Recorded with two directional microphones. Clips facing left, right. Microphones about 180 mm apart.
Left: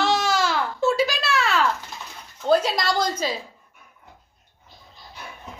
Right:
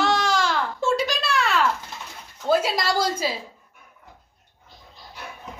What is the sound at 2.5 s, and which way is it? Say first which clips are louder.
Speech: left 1 dB; 5° right (ahead or behind).